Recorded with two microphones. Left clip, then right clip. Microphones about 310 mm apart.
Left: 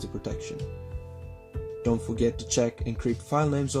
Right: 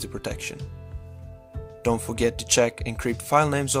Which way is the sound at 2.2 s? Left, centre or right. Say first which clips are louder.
Right 6 dB; right.